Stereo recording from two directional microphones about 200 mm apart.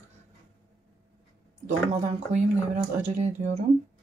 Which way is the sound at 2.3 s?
35° right (ahead or behind).